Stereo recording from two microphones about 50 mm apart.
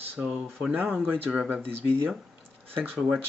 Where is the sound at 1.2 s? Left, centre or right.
Right.